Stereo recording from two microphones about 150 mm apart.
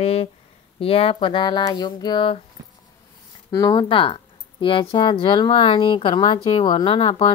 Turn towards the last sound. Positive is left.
turn(degrees=35)  # may be behind; listen again after turning